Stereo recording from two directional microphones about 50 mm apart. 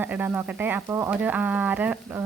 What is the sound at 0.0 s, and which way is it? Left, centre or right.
Speech, right.